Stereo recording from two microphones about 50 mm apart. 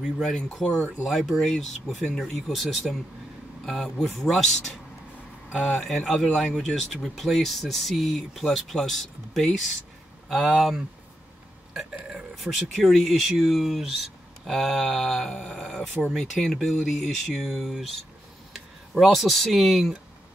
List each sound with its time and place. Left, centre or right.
0.0 s speech: centre
5.8 s speech: centre
6.6 s speech: centre
10.5 s speech: centre
12.4 s speech: centre
14.4 s speech: centre